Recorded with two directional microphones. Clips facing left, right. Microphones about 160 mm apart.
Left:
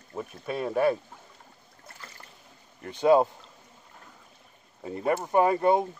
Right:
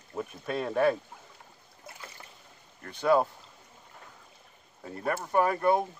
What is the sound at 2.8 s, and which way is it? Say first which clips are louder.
Speech: left 4 dB; 20° left (ahead or behind).